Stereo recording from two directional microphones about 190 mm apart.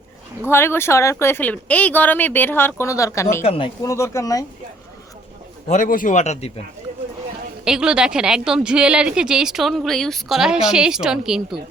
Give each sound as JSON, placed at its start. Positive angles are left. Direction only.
{"t": 0.5, "sound": "speech", "side_deg": 10}
{"t": 3.4, "sound": "speech", "side_deg": 30}
{"t": 3.8, "sound": "speech", "side_deg": 15}
{"t": 5.6, "sound": "speech", "side_deg": 40}
{"t": 7.6, "sound": "a woman's voice", "side_deg": -5}